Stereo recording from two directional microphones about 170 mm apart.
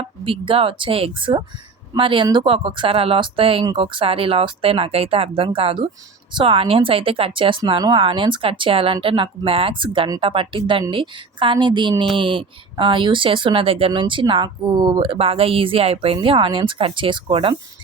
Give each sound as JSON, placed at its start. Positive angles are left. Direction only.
{"t": 0.0, "sound": "speech", "side_deg": -30}